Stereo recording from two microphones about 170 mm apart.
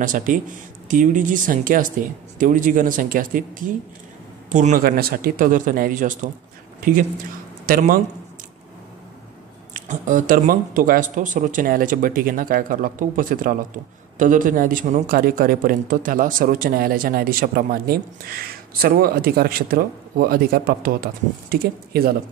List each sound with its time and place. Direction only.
0.0 s speech: 50° right (ahead or behind)
9.8 s a man's voice: 50° right (ahead or behind)